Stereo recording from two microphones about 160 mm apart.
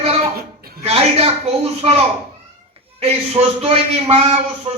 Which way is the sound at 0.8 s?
40° right (ahead or behind).